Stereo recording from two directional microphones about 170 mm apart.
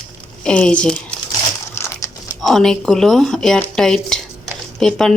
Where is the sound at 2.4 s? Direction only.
5° left (ahead or behind).